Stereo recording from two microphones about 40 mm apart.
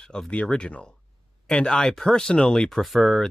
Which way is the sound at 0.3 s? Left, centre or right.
Left.